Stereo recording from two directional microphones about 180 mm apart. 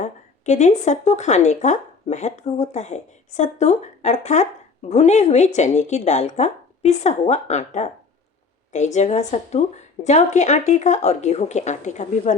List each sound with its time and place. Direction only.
0.0 s speech: 40° left (ahead or behind)